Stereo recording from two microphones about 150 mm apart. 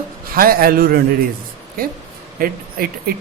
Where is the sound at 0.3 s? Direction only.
75° right (ahead or behind).